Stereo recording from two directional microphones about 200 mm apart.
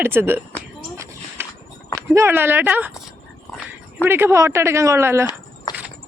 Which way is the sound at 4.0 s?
10° right (ahead or behind).